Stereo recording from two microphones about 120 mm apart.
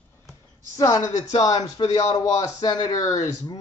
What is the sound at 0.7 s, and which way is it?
Speech, 30° left (ahead or behind).